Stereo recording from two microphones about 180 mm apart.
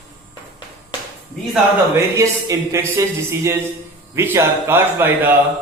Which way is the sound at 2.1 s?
15° right (ahead or behind).